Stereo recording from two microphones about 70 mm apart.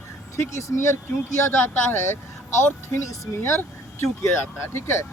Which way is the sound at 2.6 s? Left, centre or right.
Left.